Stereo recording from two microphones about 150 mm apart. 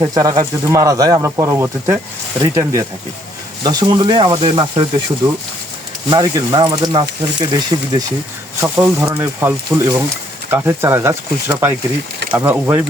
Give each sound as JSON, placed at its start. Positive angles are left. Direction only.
{"t": 0.0, "sound": "speech", "side_deg": -20}
{"t": 6.1, "sound": "speech", "side_deg": -25}
{"t": 8.6, "sound": "speech", "side_deg": -15}